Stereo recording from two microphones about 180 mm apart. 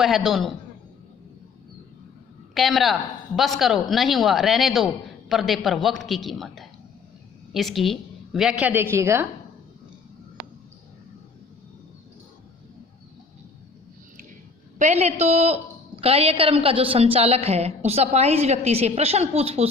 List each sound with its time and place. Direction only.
0.0 s speech: centre (ahead or behind)
2.6 s a woman's voice: centre (ahead or behind)
14.8 s a woman's voice: 40° right (ahead or behind)